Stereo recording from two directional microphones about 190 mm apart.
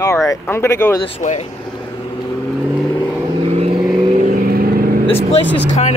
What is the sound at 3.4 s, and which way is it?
Vehicle, 35° right (ahead or behind).